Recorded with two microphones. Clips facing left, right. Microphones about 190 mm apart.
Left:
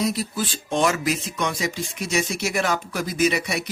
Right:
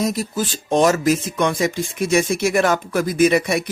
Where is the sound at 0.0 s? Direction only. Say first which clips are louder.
Right 3 dB; 45° right (ahead or behind).